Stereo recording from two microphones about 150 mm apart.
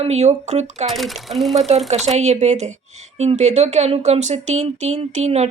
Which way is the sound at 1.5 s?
45° right (ahead or behind).